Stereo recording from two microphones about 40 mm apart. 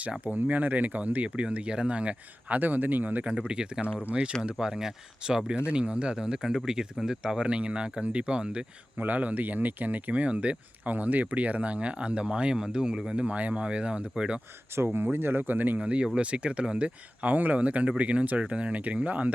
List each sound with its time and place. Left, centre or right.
0.3 s speech: right
2.6 s speech: right
3.4 s speech: right
4.6 s speech: centre
9.0 s speech: right
10.9 s speech: right
13.1 s speech: right
14.9 s speech: right
15.8 s speech: right